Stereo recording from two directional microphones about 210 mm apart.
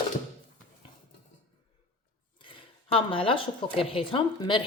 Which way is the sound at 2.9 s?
25° left (ahead or behind).